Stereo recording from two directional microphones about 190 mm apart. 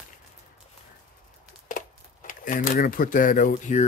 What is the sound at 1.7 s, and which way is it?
Speech, 45° left (ahead or behind).